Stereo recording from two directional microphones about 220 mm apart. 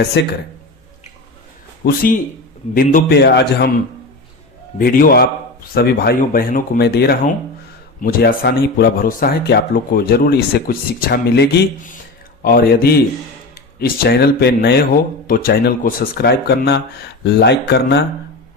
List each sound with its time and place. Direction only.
0.0 s speech: 50° left (ahead or behind)
1.8 s speech: 40° left (ahead or behind)
4.8 s speech: 40° left (ahead or behind)